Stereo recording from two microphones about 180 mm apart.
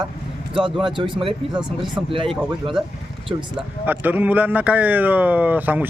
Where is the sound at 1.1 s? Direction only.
25° right (ahead or behind).